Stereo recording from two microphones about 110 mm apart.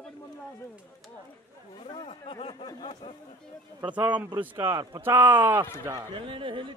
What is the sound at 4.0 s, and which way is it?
Speech, 15° right (ahead or behind).